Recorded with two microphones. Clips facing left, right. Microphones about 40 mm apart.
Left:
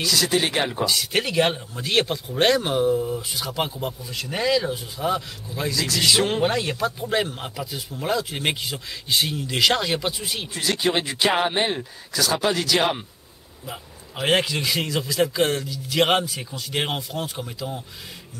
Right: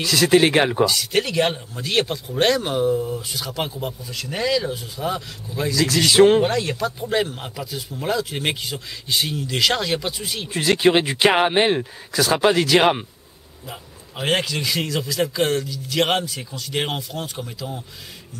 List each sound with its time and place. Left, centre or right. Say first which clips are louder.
0.0 s speech: right 6 dB; right
0.8 s a man's voice: right 2 dB; centre
6.1 s speech: right 9 dB; right
6.4 s a man's voice: right 1 dB; centre
10.6 s speech: right 6 dB; right
14.2 s a man's voice: left 1 dB; centre